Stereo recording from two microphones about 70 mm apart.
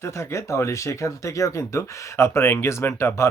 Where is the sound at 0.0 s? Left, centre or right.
Left.